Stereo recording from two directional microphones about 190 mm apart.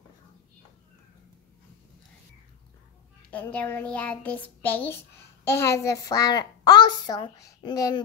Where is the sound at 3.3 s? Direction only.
10° left (ahead or behind).